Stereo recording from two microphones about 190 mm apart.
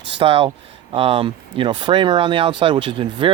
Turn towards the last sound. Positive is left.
turn(degrees=-25)  # may be behind; listen again after turning